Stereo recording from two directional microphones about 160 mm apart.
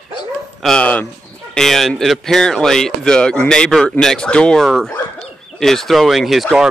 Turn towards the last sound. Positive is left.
turn(degrees=0)  # may be behind; listen again after turning